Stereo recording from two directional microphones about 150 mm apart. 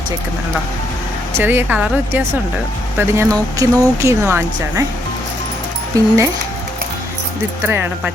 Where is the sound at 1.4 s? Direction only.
15° right (ahead or behind).